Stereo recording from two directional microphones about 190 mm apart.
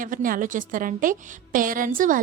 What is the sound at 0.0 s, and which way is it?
A woman's voice, 45° right (ahead or behind).